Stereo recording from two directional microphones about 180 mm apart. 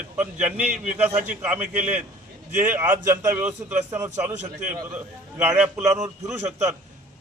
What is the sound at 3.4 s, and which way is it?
Speech, 5° right (ahead or behind).